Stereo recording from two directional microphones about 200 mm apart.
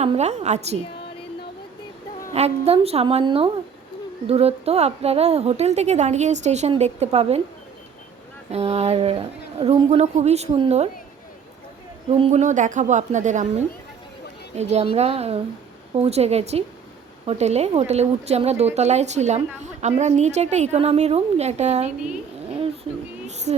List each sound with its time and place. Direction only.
0.0 s a woman's voice: 35° right (ahead or behind)
2.3 s a woman's voice: 30° right (ahead or behind)
8.5 s a woman's voice: 30° right (ahead or behind)
12.1 s a woman's voice: 30° right (ahead or behind)
22.6 s a sound: 30° right (ahead or behind)